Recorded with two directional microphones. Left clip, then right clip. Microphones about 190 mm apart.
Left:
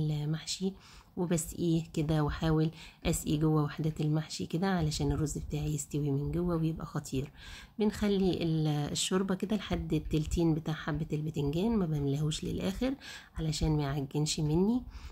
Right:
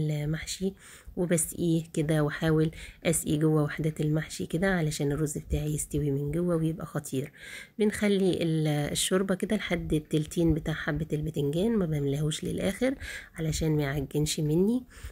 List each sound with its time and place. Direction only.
0.0 s speech: 10° right (ahead or behind)